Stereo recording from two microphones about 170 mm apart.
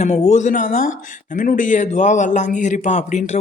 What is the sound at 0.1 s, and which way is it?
A man's voice, 40° left (ahead or behind).